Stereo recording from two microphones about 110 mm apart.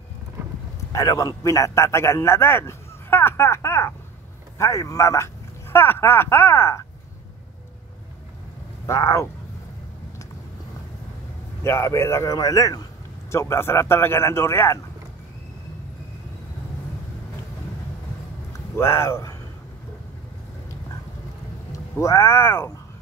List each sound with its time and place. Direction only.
0.9 s a man's voice: 35° left (ahead or behind)
8.8 s a man's voice: 25° left (ahead or behind)
11.6 s a man's voice: 25° left (ahead or behind)
18.5 s speech: 25° left (ahead or behind)
21.7 s speech: 25° left (ahead or behind)